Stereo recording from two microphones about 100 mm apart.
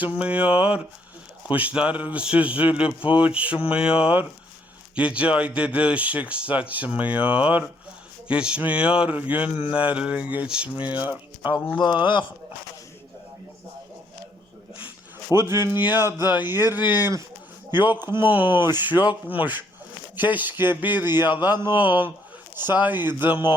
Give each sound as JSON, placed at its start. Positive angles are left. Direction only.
{"t": 0.0, "sound": "a sound", "side_deg": -15}
{"t": 15.3, "sound": "speech", "side_deg": -25}
{"t": 17.7, "sound": "speech", "side_deg": -20}